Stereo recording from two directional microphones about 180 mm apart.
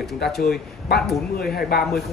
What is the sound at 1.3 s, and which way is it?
Speech, 60° left (ahead or behind).